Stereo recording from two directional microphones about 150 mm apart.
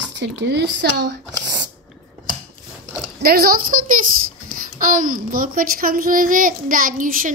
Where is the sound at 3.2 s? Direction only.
90° right.